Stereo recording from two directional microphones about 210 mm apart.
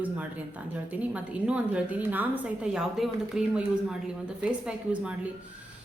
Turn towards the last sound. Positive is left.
turn(degrees=-5)  # may be behind; listen again after turning